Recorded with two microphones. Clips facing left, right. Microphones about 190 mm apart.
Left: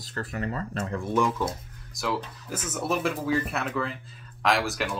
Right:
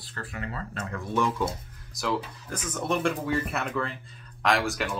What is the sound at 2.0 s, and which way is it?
Speech, centre (ahead or behind).